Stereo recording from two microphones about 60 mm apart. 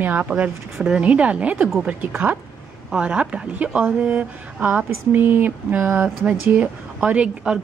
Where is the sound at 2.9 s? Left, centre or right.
Centre.